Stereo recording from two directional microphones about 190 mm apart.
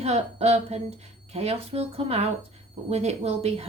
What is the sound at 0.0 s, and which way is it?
A woman's voice, 35° right (ahead or behind).